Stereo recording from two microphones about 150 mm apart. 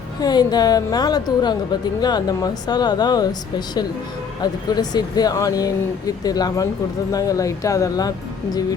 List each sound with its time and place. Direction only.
0.2 s speech: 25° left (ahead or behind)
4.4 s speech: 25° left (ahead or behind)